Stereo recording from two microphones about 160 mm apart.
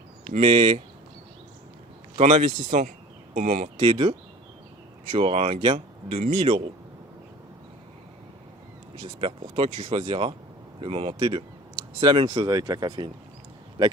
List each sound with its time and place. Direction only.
0.3 s speech: 35° right (ahead or behind)
2.1 s speech: 45° right (ahead or behind)
3.8 s speech: 35° right (ahead or behind)
5.1 s speech: 35° right (ahead or behind)
9.0 s speech: 35° right (ahead or behind)